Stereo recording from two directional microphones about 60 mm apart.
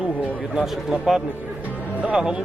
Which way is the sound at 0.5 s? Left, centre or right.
Centre.